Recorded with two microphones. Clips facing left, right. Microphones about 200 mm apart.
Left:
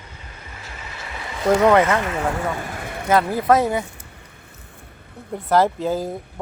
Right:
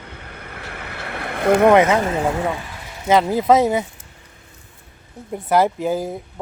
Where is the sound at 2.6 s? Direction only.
50° left (ahead or behind).